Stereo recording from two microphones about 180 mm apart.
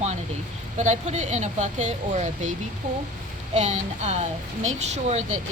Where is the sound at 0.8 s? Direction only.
40° right (ahead or behind).